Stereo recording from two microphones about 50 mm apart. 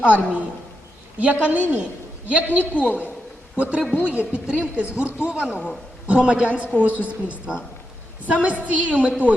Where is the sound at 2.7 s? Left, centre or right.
Left.